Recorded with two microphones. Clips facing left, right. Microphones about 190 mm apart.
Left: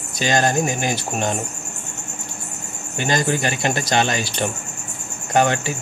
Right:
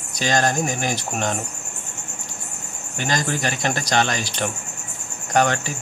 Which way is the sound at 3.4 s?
5° left (ahead or behind).